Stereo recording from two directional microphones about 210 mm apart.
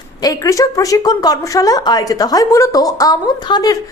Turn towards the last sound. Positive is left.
turn(degrees=20)  # may be behind; listen again after turning